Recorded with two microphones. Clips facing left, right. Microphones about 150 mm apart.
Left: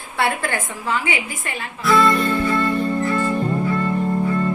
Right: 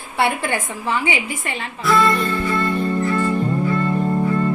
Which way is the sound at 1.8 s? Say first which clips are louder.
Left 1 dB; centre (ahead or behind).